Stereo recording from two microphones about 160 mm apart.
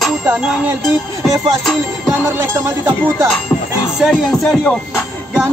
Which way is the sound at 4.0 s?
5° left (ahead or behind).